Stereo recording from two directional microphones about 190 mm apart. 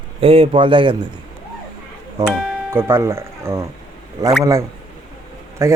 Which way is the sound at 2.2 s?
10° right (ahead or behind).